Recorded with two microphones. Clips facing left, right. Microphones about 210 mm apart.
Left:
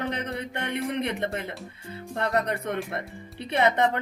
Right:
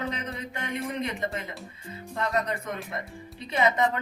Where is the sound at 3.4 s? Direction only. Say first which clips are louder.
Left 2 dB; 65° left (ahead or behind).